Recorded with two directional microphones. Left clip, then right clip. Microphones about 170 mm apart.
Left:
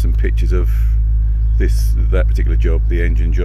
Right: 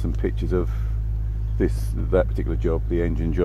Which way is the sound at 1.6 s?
20° right (ahead or behind).